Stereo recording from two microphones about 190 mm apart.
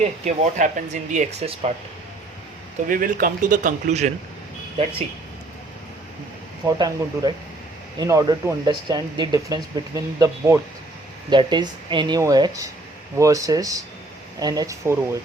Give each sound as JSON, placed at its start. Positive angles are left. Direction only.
{"t": 0.0, "sound": "speech", "side_deg": -40}
{"t": 2.8, "sound": "speech", "side_deg": -45}
{"t": 6.7, "sound": "speech", "side_deg": -20}